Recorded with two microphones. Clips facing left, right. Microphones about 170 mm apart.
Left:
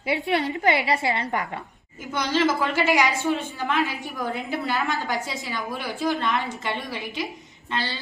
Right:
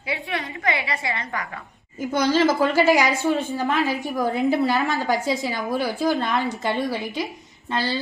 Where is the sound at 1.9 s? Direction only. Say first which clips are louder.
Right 5 dB; 40° right (ahead or behind).